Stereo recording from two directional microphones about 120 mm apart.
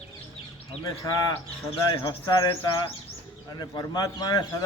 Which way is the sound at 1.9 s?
35° left (ahead or behind).